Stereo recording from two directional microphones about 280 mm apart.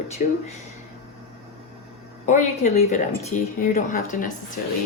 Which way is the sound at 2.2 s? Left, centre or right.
Left.